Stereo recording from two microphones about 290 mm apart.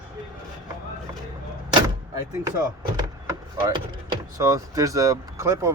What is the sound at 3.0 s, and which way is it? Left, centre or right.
Speech, centre.